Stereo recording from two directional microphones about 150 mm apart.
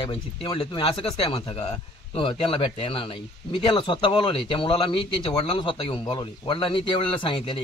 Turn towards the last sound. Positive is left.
turn(degrees=35)  # may be behind; listen again after turning